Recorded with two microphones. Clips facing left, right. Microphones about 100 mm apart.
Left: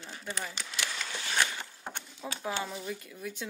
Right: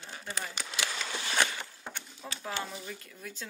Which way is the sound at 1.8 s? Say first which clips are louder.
Left 3 dB; 20° left (ahead or behind).